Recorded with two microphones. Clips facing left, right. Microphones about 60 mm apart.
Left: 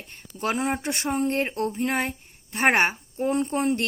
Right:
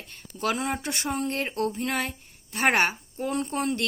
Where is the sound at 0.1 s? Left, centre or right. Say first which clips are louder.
Left 1 dB; left.